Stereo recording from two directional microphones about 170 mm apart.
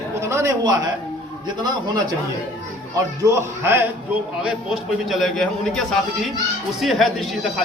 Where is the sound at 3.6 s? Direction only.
15° right (ahead or behind).